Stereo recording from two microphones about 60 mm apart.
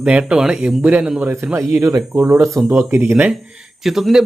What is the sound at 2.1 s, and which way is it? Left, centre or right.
Speech, right.